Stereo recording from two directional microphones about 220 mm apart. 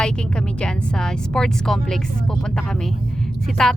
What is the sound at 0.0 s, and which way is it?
A woman's voice, 5° left (ahead or behind).